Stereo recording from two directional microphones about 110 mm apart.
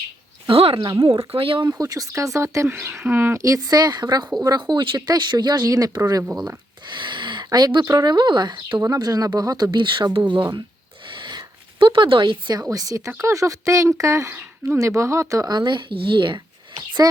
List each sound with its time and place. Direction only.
0.4 s a sound: 55° right (ahead or behind)
0.8 s speech: 40° right (ahead or behind)
1.3 s speech: 55° right (ahead or behind)
1.8 s speech: 30° right (ahead or behind); by 10.4 s 45° right (ahead or behind)
11.0 s a sound: 45° right (ahead or behind)
13.1 s speech: 25° right (ahead or behind); by 16.4 s 45° right (ahead or behind)